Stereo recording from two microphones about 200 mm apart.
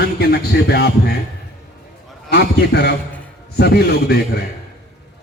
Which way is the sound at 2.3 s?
55° left (ahead or behind).